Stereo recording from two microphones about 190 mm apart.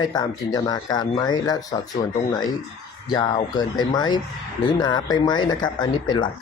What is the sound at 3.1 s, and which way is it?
Speech, 20° left (ahead or behind).